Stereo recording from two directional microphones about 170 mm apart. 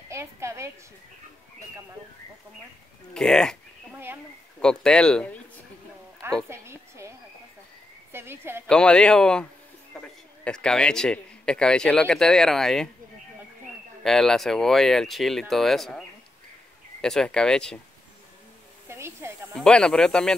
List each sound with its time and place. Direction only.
0.1 s a sound: 15° right (ahead or behind)
3.2 s speech: 5° left (ahead or behind)
3.9 s a woman's voice: 10° right (ahead or behind)
4.6 s speech: 5° left (ahead or behind)
6.5 s a woman's voice: 15° right (ahead or behind)
8.6 s speech: 5° left (ahead or behind)
14.0 s speech: 5° left (ahead or behind)
17.0 s speech: 5° left (ahead or behind)
18.9 s a sound: 15° right (ahead or behind)
19.5 s speech: 5° left (ahead or behind)